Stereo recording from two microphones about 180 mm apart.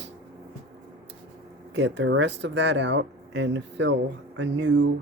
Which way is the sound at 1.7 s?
75° right (ahead or behind).